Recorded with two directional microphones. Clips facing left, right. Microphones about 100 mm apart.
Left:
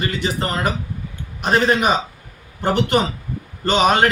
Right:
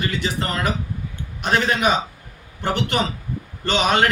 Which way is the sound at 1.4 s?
35° left (ahead or behind).